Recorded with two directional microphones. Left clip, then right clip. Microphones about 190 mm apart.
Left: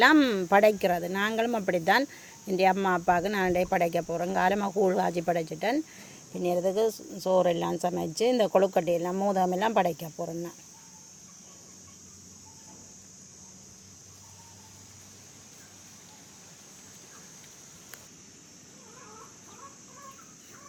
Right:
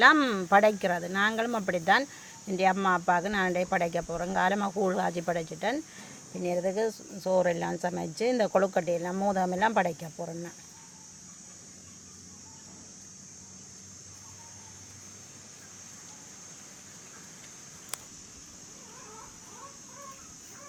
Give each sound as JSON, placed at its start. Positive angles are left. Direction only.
{"t": 0.0, "sound": "speech", "side_deg": 35}